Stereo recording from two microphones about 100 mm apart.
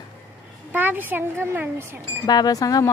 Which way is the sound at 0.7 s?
20° right (ahead or behind).